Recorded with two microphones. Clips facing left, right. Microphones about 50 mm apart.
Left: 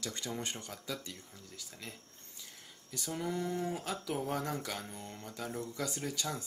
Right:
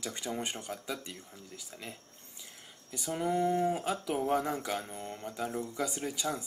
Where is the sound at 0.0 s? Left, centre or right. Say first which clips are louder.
Right 3 dB; centre.